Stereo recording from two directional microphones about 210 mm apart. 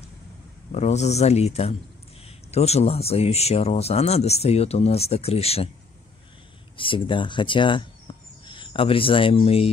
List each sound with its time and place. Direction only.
0.7 s speech: 35° left (ahead or behind)
6.8 s speech: 25° left (ahead or behind)